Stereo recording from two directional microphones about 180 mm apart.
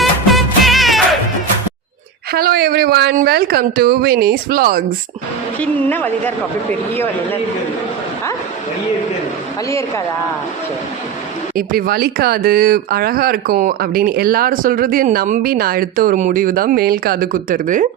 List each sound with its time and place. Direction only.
0.0 s music: centre (ahead or behind)
2.3 s speech: 55° right (ahead or behind)
5.5 s a woman's voice: 10° left (ahead or behind)
9.6 s a woman's voice: 15° left (ahead or behind)
11.5 s speech: 55° right (ahead or behind)